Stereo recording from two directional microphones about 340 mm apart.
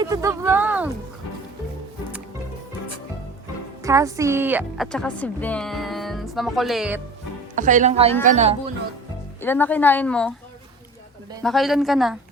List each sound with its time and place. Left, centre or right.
0.0 s speech: centre
3.8 s a woman's voice: centre
7.5 s speech: right
9.4 s a woman's voice: centre
11.4 s a woman's voice: centre